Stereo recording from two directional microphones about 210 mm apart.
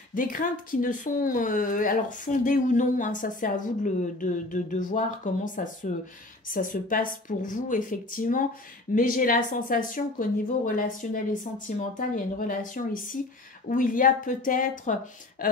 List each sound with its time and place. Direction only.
0.1 s speech: 40° left (ahead or behind)